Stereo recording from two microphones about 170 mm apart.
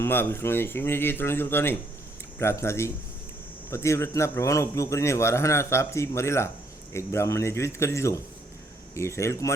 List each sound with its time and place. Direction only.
0.0 s a man's voice: 15° left (ahead or behind)